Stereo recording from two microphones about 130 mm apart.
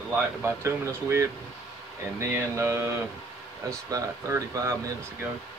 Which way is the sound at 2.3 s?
20° right (ahead or behind).